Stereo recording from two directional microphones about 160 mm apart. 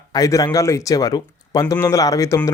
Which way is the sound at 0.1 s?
20° left (ahead or behind).